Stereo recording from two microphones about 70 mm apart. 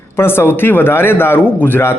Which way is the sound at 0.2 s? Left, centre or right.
Left.